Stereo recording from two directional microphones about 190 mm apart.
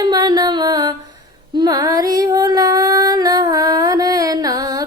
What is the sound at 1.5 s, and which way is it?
Music, 20° right (ahead or behind).